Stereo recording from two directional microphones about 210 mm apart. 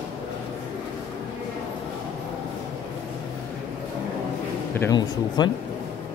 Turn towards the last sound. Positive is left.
turn(degrees=20)  # may be behind; listen again after turning